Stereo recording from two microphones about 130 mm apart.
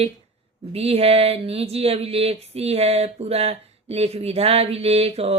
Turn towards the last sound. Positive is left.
turn(degrees=-50)  # may be behind; listen again after turning